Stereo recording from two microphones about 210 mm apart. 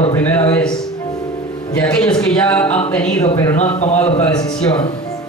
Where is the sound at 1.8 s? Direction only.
5° left (ahead or behind).